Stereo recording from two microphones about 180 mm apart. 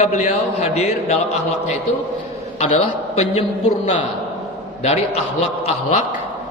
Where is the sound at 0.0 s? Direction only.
40° left (ahead or behind).